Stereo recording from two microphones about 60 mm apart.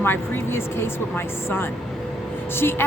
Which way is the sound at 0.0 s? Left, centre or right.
Left.